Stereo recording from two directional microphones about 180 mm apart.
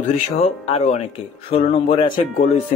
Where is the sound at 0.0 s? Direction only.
35° left (ahead or behind).